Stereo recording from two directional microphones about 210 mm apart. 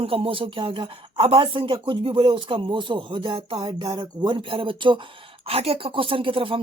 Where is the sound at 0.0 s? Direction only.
25° right (ahead or behind).